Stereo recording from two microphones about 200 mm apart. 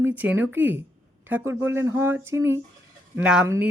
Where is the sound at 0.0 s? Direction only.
10° right (ahead or behind).